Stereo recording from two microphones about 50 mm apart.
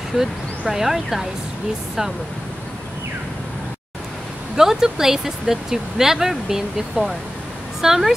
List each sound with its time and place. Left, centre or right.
0.1 s speech: centre
4.6 s speech: centre